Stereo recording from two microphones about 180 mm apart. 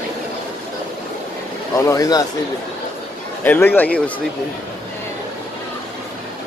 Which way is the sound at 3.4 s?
10° left (ahead or behind).